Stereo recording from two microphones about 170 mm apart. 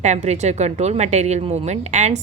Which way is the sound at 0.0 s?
45° right (ahead or behind).